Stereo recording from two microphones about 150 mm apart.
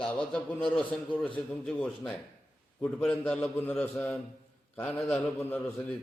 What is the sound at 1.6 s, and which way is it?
A man's voice, 5° left (ahead or behind).